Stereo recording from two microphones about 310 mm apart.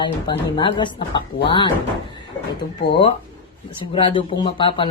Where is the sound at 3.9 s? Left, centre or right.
Centre.